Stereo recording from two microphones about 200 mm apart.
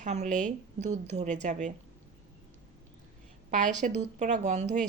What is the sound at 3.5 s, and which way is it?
A woman's voice, 40° right (ahead or behind).